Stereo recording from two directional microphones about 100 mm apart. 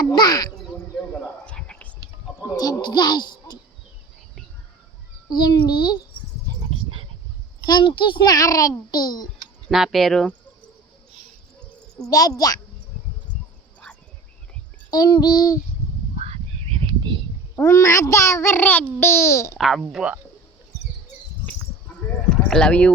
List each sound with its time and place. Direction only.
0.0 s a child's voice: 45° left (ahead or behind)
1.5 s whispering: 10° left (ahead or behind)
2.6 s speech: 45° left (ahead or behind)
5.3 s a child's voice: 45° left (ahead or behind)
6.5 s a sound: 35° right (ahead or behind)
7.6 s a child's voice: 45° left (ahead or behind)
9.6 s speech: centre (ahead or behind)
12.0 s a child's voice: 35° left (ahead or behind)
14.8 s a child's voice: 40° left (ahead or behind)
16.2 s a sound: 85° right
17.6 s a child's voice: 30° left (ahead or behind)
19.5 s speech: 5° right (ahead or behind)
22.4 s speech: 5° left (ahead or behind)